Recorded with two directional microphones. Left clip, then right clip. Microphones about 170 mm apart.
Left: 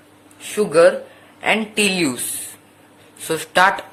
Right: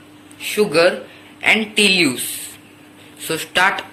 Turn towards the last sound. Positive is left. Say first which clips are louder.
# left 1 dB
turn(degrees=45)  # may be behind; listen again after turning